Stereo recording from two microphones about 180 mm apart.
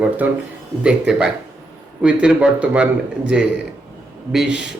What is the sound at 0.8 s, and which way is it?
A man's voice, 5° right (ahead or behind).